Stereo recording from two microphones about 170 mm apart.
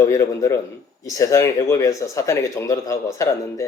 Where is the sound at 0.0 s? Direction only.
15° left (ahead or behind).